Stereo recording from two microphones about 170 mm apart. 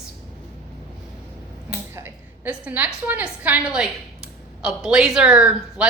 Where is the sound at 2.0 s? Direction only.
10° right (ahead or behind).